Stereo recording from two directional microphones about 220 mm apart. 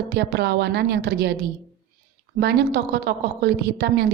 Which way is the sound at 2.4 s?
50° right (ahead or behind).